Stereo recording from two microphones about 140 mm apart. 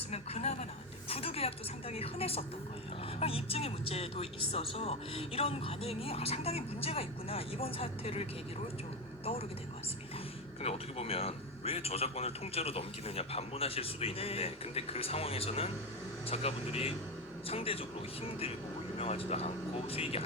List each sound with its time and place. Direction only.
0.1 s speech: 50° left (ahead or behind)
10.6 s speech: 45° left (ahead or behind)